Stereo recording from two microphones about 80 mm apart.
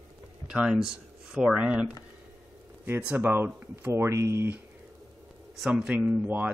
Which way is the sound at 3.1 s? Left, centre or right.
Right.